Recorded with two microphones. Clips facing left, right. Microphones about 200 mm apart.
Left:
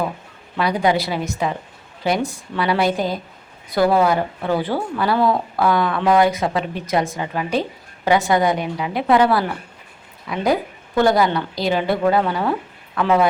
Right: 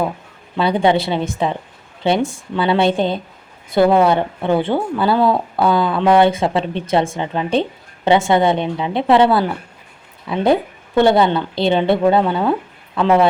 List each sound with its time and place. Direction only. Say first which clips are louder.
0.6 s speech: right 3 dB; 25° right (ahead or behind)